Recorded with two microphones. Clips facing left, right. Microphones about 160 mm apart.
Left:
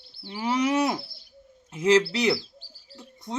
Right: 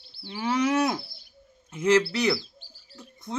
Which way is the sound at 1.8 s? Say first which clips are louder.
Left 1 dB; 35° left (ahead or behind).